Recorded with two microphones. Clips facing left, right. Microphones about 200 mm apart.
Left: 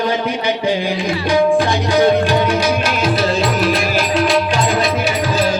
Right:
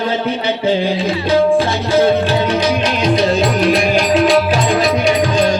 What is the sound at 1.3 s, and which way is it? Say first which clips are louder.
Music: right 1 dB; 15° left (ahead or behind).